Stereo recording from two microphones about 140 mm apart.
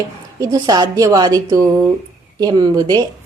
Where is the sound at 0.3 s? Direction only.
25° right (ahead or behind).